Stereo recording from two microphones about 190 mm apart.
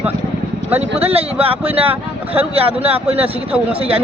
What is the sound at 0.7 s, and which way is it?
Speech, 30° right (ahead or behind).